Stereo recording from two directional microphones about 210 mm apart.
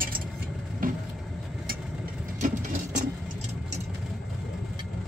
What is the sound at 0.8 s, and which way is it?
Vehicle, 40° right (ahead or behind).